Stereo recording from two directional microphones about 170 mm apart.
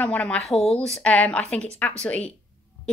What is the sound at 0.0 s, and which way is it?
A woman's voice, 10° left (ahead or behind).